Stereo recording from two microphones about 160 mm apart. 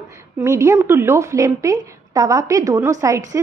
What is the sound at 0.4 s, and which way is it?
A woman's voice, 20° right (ahead or behind).